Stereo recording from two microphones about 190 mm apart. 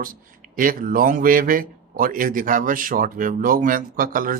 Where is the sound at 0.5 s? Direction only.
45° right (ahead or behind).